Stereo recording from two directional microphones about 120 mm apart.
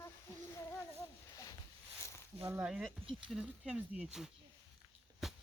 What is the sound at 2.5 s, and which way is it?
Speech, 10° right (ahead or behind).